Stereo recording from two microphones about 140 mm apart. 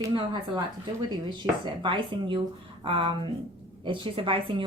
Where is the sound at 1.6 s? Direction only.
35° right (ahead or behind).